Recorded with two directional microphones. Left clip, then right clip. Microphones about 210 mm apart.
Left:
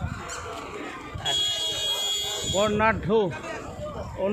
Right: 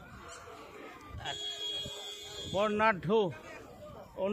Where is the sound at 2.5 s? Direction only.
55° right (ahead or behind).